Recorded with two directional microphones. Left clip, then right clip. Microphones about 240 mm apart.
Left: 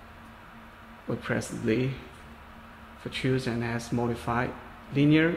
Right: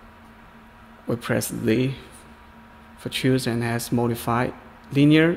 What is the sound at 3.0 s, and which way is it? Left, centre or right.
Speech, right.